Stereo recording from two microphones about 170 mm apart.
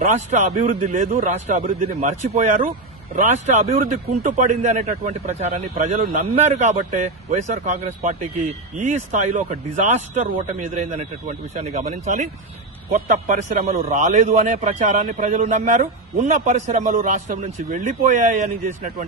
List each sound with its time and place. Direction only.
0.0 s a man's voice: 45° right (ahead or behind)